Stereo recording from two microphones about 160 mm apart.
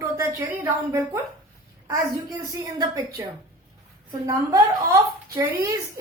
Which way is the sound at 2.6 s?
20° right (ahead or behind).